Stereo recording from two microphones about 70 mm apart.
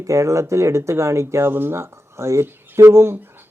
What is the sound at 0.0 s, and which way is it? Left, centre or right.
Speech, right.